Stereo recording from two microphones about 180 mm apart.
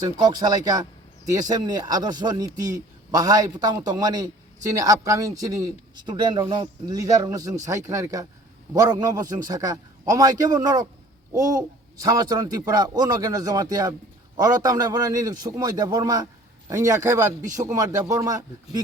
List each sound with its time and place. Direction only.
0.0 s speech: 20° right (ahead or behind)